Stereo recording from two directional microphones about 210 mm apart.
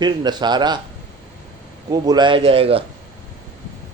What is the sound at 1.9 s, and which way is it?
Speech, 20° right (ahead or behind).